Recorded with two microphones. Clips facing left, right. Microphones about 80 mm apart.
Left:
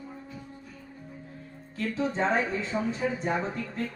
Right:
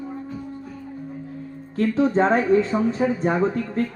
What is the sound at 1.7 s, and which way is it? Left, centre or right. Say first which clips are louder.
Speech: right 10 dB; right.